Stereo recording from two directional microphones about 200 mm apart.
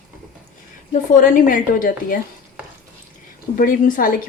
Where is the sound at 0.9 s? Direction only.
40° left (ahead or behind).